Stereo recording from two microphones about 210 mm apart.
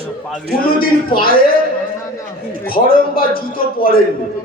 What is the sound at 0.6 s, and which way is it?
Speech, 45° left (ahead or behind).